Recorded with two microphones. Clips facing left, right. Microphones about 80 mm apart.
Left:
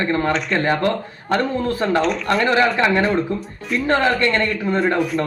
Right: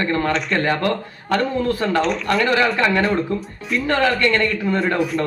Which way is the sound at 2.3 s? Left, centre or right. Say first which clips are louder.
Left 2 dB; left.